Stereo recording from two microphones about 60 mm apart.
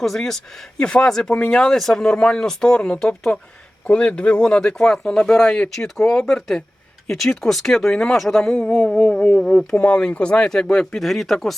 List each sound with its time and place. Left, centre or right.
0.0 s speech: centre
8.5 s a sound: left
8.9 s speech: centre
9.7 s speech: centre